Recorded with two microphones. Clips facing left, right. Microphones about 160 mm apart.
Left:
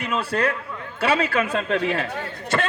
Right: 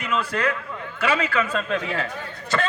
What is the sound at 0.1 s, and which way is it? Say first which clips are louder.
A man's voice: left 1 dB; 30° left (ahead or behind).